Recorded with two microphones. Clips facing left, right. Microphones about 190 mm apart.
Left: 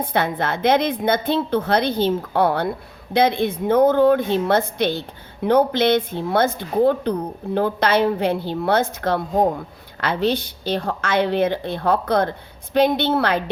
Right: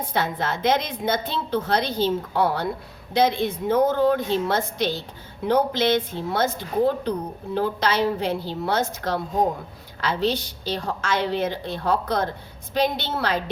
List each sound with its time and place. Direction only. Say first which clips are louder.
0.1 s a woman's voice: left 2 dB; 60° left (ahead or behind)